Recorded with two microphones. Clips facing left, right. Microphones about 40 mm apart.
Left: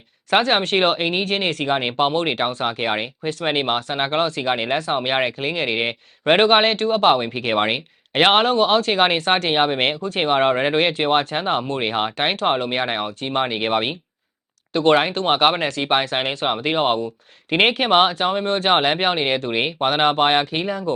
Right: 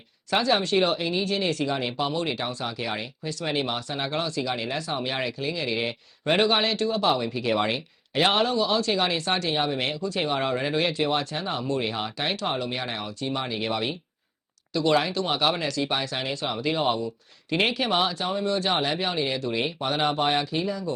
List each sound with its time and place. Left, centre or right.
0.3 s speech: left